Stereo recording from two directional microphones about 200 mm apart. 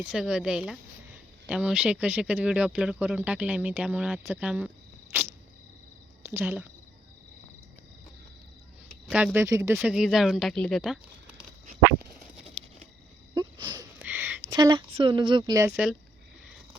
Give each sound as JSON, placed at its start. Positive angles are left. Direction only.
{"t": 0.0, "sound": "speech", "side_deg": -5}
{"t": 6.3, "sound": "speech", "side_deg": -10}
{"t": 9.0, "sound": "speech", "side_deg": -5}
{"t": 9.7, "sound": "speech", "side_deg": -5}
{"t": 13.3, "sound": "wheeze", "side_deg": -20}
{"t": 14.0, "sound": "a sound", "side_deg": -10}
{"t": 14.4, "sound": "speech", "side_deg": -20}
{"t": 15.7, "sound": "speech", "side_deg": -5}